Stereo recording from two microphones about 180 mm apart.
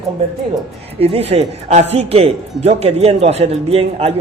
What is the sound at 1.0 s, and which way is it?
Speech, 35° right (ahead or behind).